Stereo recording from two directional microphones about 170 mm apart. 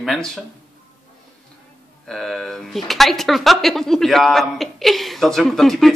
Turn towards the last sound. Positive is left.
turn(degrees=0)  # may be behind; listen again after turning